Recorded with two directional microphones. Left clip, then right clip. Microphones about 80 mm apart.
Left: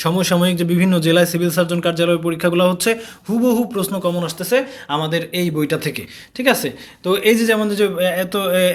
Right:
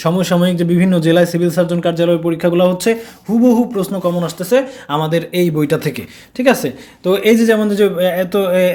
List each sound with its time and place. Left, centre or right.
0.0 s a man's voice: right
4.2 s speech: right